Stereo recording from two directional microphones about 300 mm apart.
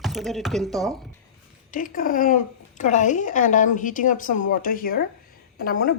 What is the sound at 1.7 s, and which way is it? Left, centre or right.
Speech, left.